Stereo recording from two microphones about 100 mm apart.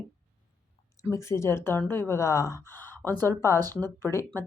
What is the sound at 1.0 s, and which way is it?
Speech, 30° left (ahead or behind).